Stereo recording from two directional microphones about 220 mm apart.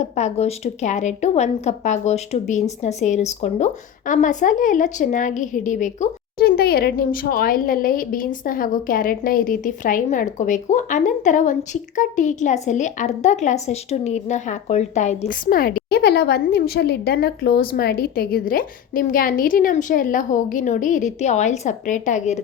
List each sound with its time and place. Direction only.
0.0 s a woman's voice: 30° left (ahead or behind)